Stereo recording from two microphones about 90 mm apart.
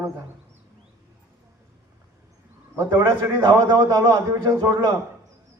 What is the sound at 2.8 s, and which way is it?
A man's voice, 30° right (ahead or behind).